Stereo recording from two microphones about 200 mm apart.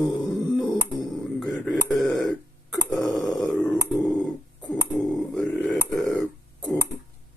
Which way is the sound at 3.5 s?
5° left (ahead or behind).